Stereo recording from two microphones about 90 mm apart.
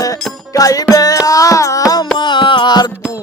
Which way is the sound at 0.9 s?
40° left (ahead or behind).